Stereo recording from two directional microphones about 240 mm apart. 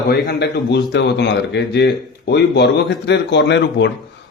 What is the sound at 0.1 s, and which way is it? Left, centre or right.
A man's voice, left.